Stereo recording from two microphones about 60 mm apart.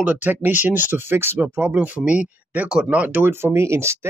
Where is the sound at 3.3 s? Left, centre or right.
Right.